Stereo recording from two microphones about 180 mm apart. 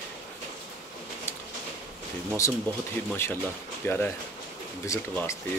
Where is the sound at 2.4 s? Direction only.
15° left (ahead or behind).